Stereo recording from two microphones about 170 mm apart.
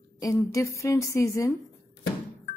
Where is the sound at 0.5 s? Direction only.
20° left (ahead or behind).